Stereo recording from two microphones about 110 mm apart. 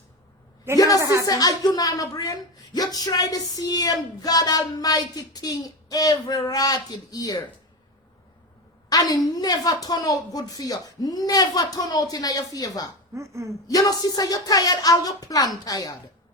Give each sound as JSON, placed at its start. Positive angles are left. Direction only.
{"t": 0.9, "sound": "speech", "side_deg": -30}
{"t": 1.2, "sound": "a woman's voice", "side_deg": 35}
{"t": 8.9, "sound": "a woman's voice", "side_deg": 35}
{"t": 13.1, "sound": "speech", "side_deg": -25}
{"t": 13.7, "sound": "a woman's voice", "side_deg": 35}